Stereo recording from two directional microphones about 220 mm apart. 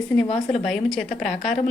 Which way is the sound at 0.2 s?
Centre (ahead or behind).